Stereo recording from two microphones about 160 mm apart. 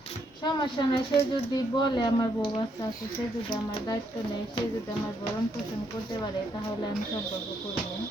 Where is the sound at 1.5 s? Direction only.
25° left (ahead or behind).